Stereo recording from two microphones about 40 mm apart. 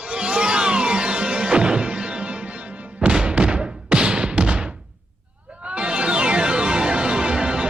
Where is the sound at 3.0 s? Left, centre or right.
Right.